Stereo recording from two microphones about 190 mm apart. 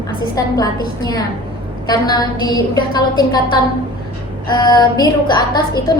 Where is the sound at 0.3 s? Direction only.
20° left (ahead or behind).